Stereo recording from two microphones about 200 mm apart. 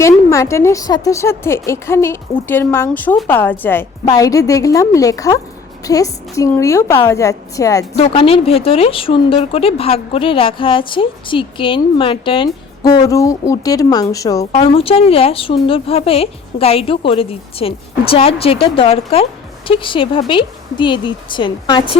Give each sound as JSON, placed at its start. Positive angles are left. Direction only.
{"t": 0.0, "sound": "a woman's voice", "side_deg": 15}
{"t": 7.9, "sound": "speech", "side_deg": 30}